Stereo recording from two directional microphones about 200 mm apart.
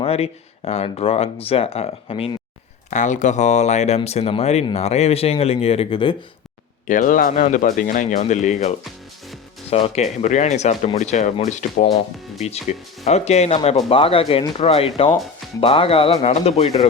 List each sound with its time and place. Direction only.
0.0 s speech: 30° left (ahead or behind)
6.8 s speech: 40° left (ahead or behind)